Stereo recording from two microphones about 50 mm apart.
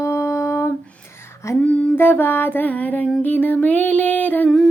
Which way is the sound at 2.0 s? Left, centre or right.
Left.